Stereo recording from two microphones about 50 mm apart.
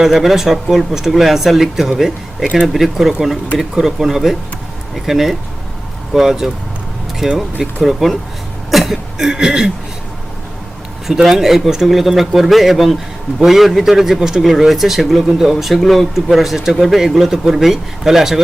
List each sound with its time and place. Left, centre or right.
0.0 s a man's voice: centre
11.0 s a man's voice: centre